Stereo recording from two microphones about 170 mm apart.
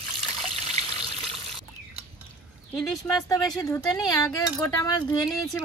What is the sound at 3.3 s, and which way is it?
Speech, 20° left (ahead or behind).